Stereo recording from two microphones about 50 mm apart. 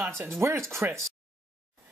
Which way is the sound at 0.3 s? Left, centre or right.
Right.